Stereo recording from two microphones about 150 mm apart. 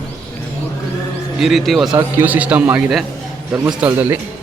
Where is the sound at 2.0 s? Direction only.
15° right (ahead or behind).